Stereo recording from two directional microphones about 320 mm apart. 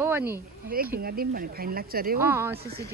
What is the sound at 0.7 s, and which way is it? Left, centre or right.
Speech, right.